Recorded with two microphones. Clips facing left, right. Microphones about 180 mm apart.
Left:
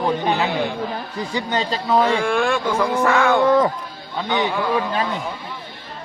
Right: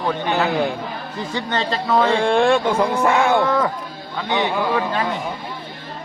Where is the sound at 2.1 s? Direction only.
30° right (ahead or behind).